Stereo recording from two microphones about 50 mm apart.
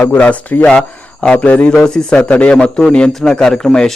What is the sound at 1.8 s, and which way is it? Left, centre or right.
A man's voice, centre.